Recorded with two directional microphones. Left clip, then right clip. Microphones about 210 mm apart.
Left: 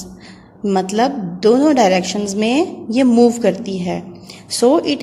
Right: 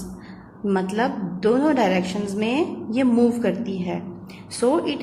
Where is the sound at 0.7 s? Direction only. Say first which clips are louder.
Left 7 dB; 40° left (ahead or behind).